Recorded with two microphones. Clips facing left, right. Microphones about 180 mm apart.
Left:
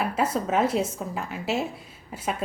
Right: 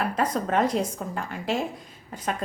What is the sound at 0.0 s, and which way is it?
A woman's voice, 5° left (ahead or behind).